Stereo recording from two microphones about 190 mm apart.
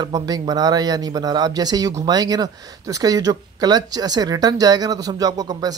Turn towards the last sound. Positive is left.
turn(degrees=-20)  # may be behind; listen again after turning